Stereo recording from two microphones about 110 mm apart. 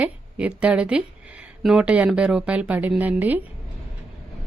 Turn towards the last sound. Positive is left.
turn(degrees=-15)  # may be behind; listen again after turning